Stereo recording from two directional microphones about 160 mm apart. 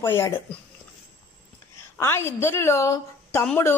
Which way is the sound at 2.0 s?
15° left (ahead or behind).